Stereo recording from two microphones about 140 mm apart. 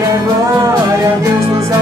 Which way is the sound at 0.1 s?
25° right (ahead or behind).